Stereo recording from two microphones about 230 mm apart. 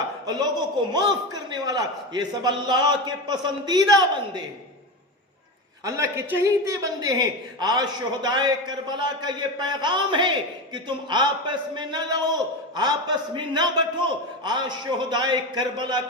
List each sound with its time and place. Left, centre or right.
0.3 s a man's voice: centre
5.8 s a man's voice: centre